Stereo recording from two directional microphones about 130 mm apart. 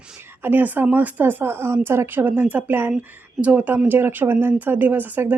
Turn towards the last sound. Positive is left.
turn(degrees=-15)  # may be behind; listen again after turning